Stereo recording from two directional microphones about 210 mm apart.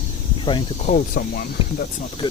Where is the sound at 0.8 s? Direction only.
40° left (ahead or behind).